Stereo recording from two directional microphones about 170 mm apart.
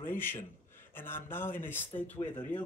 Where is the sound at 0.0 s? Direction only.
15° left (ahead or behind).